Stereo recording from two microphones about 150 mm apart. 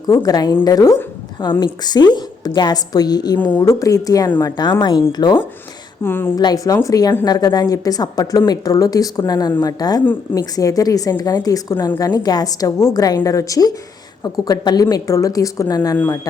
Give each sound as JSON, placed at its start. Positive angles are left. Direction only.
{"t": 0.1, "sound": "speech", "side_deg": 25}
{"t": 3.3, "sound": "a woman's voice", "side_deg": 10}
{"t": 3.6, "sound": "speech", "side_deg": 20}
{"t": 6.0, "sound": "a woman's voice", "side_deg": 15}
{"t": 6.3, "sound": "speech", "side_deg": 25}